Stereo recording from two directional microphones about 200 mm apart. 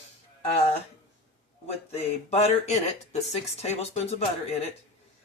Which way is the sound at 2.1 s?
30° left (ahead or behind).